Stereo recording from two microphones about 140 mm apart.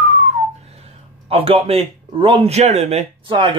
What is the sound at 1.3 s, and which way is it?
Speech, 45° right (ahead or behind).